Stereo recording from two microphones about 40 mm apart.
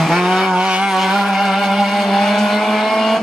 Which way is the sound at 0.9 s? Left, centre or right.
Centre.